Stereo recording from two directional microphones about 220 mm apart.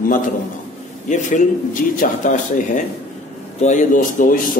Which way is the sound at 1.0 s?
35° left (ahead or behind).